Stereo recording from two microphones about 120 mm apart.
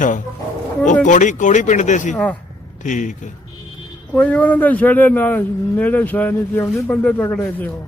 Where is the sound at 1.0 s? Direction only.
90° left.